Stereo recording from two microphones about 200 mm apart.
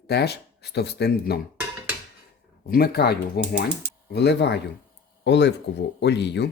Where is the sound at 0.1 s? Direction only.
55° left (ahead or behind).